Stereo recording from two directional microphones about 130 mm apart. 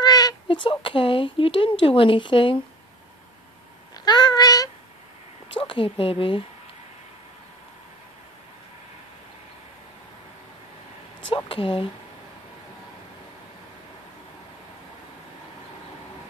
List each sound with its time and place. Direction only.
0.0 s speech: 30° left (ahead or behind)
3.9 s babbling: 30° left (ahead or behind)
5.5 s a woman's voice: 40° left (ahead or behind)
11.3 s speech: 40° left (ahead or behind)